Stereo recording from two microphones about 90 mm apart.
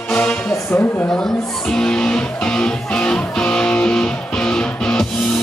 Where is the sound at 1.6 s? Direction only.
10° left (ahead or behind).